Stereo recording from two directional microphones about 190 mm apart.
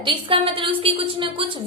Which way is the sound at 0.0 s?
25° right (ahead or behind).